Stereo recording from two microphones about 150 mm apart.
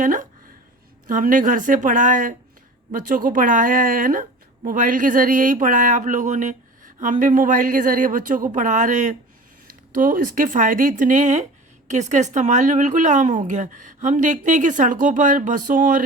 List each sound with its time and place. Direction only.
0.0 s a woman's voice: 60° right (ahead or behind)